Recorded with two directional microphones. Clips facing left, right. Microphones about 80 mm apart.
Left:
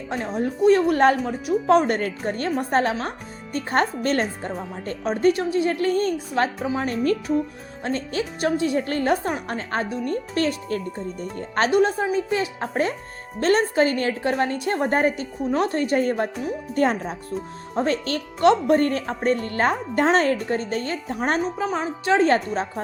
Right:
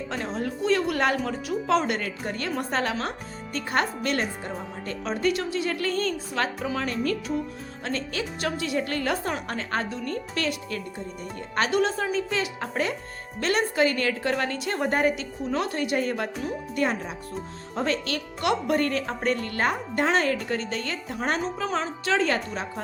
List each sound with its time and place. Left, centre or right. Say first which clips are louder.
0.4 s a woman's voice: left 8 dB; left
6.8 s a woman's voice: left 7 dB; left; by 10.2 s centre
10.3 s a woman's voice: left 7 dB; left
11.7 s a woman's voice: left 5 dB; left
16.3 s speech: left 3 dB; centre
16.7 s a woman's voice: left 6 dB; left
17.7 s a woman's voice: left 4 dB; left
20.5 s a woman's voice: left 4 dB; left
21.6 s a woman's voice: left 3 dB; centre